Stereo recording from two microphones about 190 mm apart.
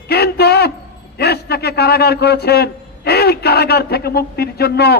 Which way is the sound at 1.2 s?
55° left (ahead or behind).